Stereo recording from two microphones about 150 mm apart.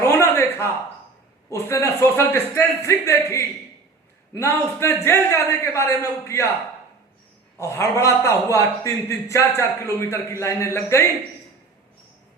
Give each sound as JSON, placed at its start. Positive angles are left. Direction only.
{"t": 0.0, "sound": "a sound", "side_deg": 20}
{"t": 1.5, "sound": "a man's voice", "side_deg": 15}
{"t": 7.6, "sound": "a man's voice", "side_deg": 20}